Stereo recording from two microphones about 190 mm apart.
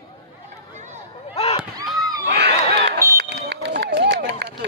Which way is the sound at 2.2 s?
60° right (ahead or behind).